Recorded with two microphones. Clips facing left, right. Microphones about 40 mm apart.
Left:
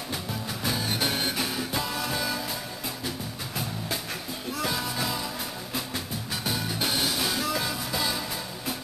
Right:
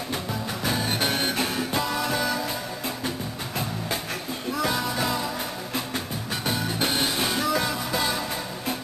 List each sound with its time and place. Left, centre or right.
0.3 s music: centre
4.6 s music: centre
6.4 s music: centre